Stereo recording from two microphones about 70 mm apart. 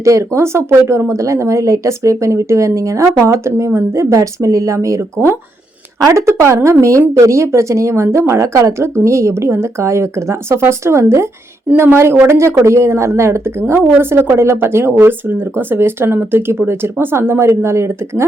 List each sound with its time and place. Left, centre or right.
0.0 s a woman's voice: right